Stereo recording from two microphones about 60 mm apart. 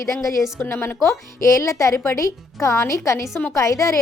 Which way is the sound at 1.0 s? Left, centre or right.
Left.